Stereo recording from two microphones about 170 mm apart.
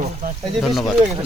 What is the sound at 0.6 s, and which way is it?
Speech, centre (ahead or behind).